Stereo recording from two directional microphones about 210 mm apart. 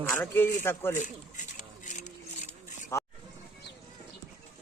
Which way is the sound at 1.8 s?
35° left (ahead or behind).